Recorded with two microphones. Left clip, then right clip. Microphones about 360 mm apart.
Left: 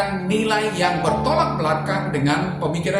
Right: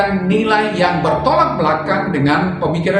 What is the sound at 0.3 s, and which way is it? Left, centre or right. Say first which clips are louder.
Speech: right 4 dB; left.